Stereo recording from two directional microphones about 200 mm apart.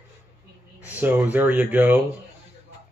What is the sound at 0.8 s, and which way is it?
Speech, 10° right (ahead or behind).